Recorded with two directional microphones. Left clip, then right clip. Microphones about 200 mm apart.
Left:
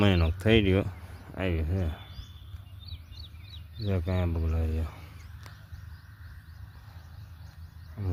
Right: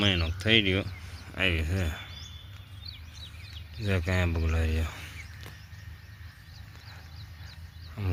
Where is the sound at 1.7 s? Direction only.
5° left (ahead or behind).